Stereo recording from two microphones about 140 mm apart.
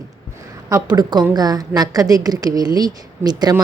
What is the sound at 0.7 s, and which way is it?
Speech, 30° right (ahead or behind).